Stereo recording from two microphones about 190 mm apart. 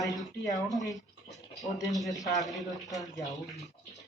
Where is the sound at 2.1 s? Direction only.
20° left (ahead or behind).